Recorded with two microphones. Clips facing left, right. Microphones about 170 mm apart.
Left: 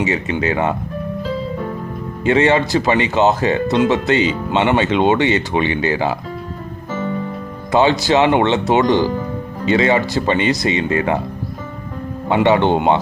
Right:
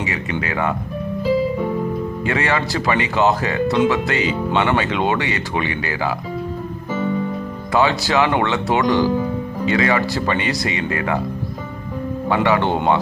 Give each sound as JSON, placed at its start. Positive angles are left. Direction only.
{"t": 0.0, "sound": "speech", "side_deg": 25}
{"t": 2.2, "sound": "speech", "side_deg": 20}
{"t": 7.7, "sound": "speech", "side_deg": 20}
{"t": 12.3, "sound": "speech", "side_deg": 20}